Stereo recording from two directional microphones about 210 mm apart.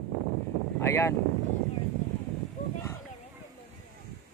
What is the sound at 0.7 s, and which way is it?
Speech, 10° left (ahead or behind).